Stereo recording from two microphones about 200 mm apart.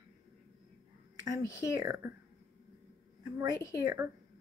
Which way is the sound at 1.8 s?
15° right (ahead or behind).